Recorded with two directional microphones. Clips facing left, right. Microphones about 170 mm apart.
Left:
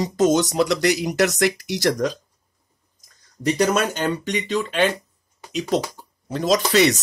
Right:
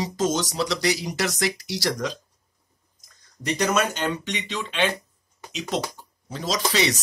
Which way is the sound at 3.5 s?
45° left (ahead or behind).